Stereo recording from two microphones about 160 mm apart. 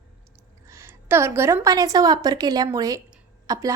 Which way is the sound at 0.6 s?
15° right (ahead or behind).